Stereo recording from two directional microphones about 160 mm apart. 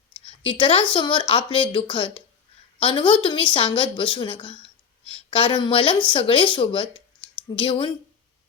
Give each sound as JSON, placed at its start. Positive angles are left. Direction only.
{"t": 0.3, "sound": "a woman's voice", "side_deg": 35}